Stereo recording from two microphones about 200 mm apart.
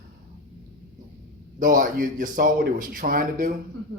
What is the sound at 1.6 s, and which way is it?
A man's voice, 40° right (ahead or behind).